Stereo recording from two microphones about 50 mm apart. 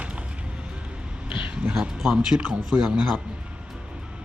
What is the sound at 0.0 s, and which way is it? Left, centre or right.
Music, right.